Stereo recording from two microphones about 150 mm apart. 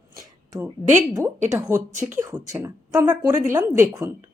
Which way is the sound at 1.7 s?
15° right (ahead or behind).